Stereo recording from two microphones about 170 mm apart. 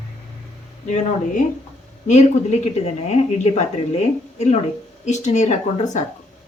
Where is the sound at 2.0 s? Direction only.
40° left (ahead or behind).